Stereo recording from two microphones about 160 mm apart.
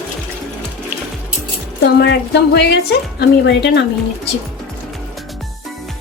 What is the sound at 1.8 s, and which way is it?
A woman's voice, 90° left.